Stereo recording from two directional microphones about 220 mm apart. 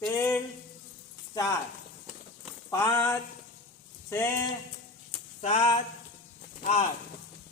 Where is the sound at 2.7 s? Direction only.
10° left (ahead or behind).